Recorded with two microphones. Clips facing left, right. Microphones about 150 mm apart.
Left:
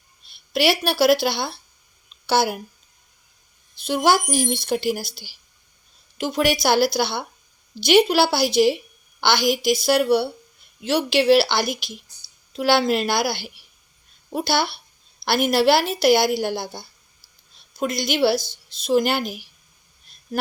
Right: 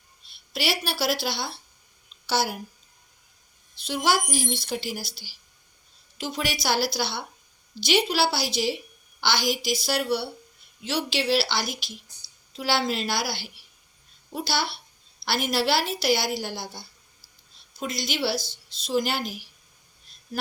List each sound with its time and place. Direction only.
0.5 s speech: 60° left (ahead or behind)
3.8 s speech: 55° left (ahead or behind)
20.3 s a sound: 50° left (ahead or behind)